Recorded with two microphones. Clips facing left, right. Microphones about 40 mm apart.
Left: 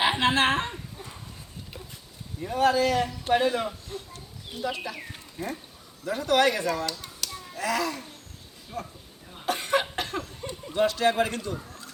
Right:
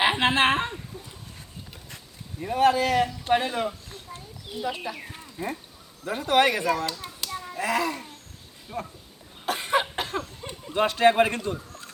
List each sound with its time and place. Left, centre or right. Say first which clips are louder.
0.0 s speech: right 1 dB; centre
2.6 s speech: right 2 dB; right
3.2 s a man's voice: left 4 dB; centre
4.9 s a man's voice: right 2 dB; centre
6.1 s speech: right 1 dB; right
7.0 s children playing: right 3 dB; right
8.7 s a man's voice: right 2 dB; centre
9.5 s cough: right 1 dB; centre
10.7 s speech: right 3 dB; right